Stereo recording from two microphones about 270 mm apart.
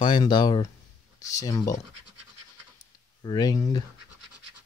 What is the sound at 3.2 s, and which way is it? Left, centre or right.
Speech, centre.